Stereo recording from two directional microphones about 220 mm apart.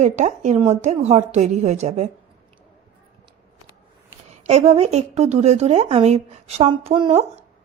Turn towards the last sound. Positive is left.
turn(degrees=-25)  # may be behind; listen again after turning